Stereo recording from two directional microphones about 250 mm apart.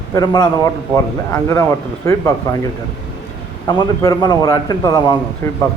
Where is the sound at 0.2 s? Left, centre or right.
Centre.